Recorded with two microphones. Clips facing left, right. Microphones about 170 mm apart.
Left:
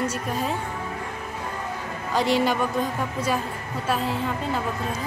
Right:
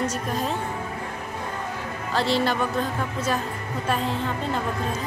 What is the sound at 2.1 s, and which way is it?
A woman's voice, 10° left (ahead or behind).